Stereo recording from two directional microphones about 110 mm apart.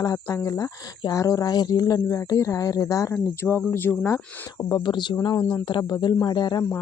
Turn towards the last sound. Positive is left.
turn(degrees=40)  # may be behind; listen again after turning